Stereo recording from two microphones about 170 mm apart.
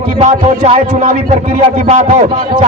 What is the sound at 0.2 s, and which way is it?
A man's voice, 35° right (ahead or behind).